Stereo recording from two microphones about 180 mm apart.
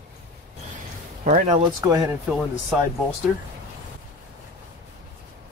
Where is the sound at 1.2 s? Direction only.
45° right (ahead or behind).